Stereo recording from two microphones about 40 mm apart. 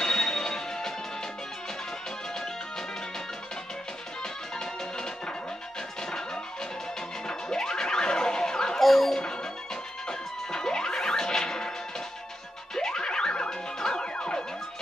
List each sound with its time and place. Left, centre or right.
0.0 s music: centre
4.2 s music: centre
7.2 s music: centre
10.0 s music: centre
12.7 s music: centre